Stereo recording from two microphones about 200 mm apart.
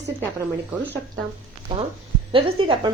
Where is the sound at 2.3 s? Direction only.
25° right (ahead or behind).